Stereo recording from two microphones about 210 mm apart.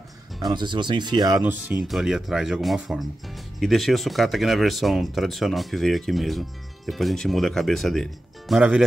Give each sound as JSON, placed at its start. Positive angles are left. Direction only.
{"t": 0.5, "sound": "speech", "side_deg": -20}